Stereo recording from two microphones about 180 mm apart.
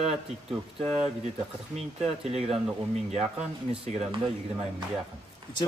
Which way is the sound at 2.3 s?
35° right (ahead or behind).